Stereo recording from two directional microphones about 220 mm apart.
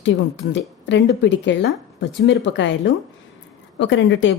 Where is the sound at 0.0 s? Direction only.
55° left (ahead or behind).